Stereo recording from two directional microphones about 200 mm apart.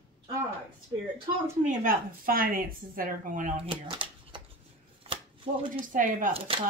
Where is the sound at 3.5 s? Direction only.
25° right (ahead or behind).